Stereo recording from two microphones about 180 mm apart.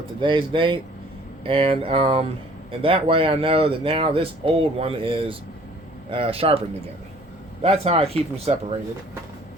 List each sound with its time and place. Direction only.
0.2 s speech: 25° right (ahead or behind)
7.6 s speech: 35° right (ahead or behind)